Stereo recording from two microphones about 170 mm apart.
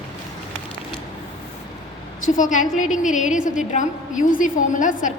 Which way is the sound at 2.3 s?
50° left (ahead or behind).